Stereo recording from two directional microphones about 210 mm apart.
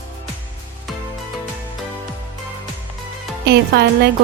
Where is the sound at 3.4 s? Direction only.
50° right (ahead or behind).